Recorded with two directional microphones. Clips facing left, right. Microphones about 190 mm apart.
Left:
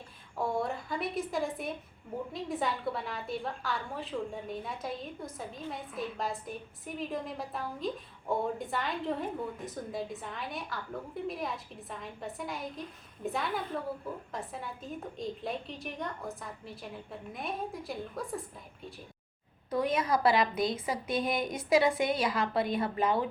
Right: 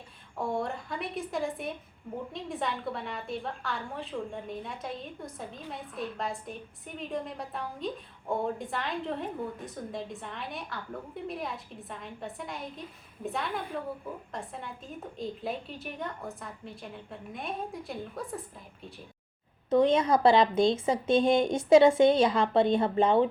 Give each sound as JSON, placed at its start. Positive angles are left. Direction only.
{"t": 0.3, "sound": "a woman's voice", "side_deg": 0}
{"t": 19.7, "sound": "a woman's voice", "side_deg": -25}